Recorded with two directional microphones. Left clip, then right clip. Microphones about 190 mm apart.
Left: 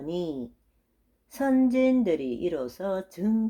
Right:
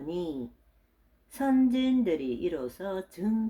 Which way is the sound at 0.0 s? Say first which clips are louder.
Left 3 dB; 30° left (ahead or behind).